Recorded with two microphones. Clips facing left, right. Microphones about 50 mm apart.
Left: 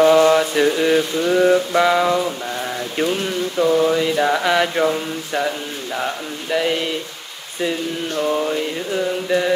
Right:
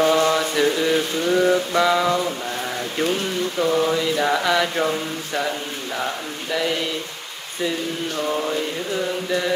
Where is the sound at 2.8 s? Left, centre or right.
Left.